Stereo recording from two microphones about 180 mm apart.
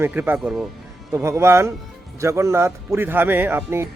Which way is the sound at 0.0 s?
10° right (ahead or behind).